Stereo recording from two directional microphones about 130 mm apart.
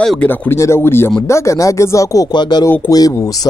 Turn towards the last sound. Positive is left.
turn(degrees=25)  # may be behind; listen again after turning